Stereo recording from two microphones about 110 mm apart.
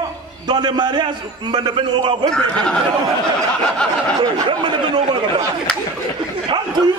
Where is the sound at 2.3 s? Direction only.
5° left (ahead or behind).